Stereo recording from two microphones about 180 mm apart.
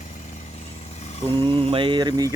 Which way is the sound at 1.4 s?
30° right (ahead or behind).